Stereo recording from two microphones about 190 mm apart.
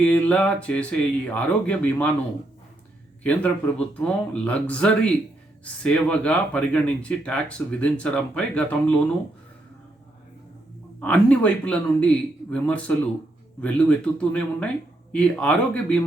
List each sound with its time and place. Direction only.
0.0 s speech: 5° left (ahead or behind)
3.2 s speech: 5° left (ahead or behind)
11.0 s speech: 5° left (ahead or behind)